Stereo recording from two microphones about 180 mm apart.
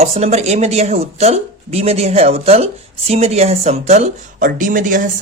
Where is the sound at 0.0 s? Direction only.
35° right (ahead or behind).